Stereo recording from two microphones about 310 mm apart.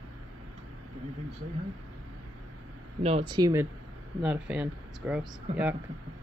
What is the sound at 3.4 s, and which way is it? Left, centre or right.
Speech, centre.